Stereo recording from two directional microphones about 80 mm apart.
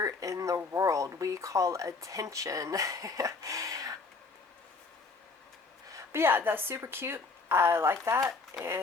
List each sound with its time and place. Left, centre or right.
0.0 s speech: right
5.9 s a woman's voice: right
8.5 s dog: right